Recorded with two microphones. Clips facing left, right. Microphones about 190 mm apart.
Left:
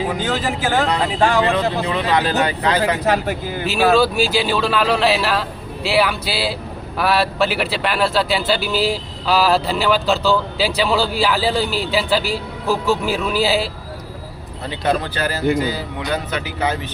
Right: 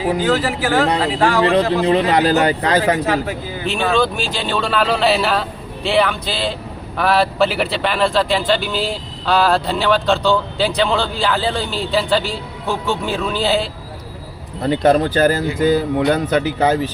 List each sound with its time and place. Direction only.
0.2 s a man's voice: 20° left (ahead or behind)
1.5 s speech: 35° right (ahead or behind)
3.7 s speech: 5° left (ahead or behind)
14.6 s speech: 45° right (ahead or behind)